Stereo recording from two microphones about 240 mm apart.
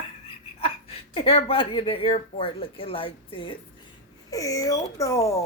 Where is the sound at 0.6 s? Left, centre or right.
Left.